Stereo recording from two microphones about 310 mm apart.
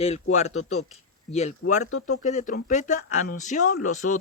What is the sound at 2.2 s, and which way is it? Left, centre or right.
A woman's voice, left.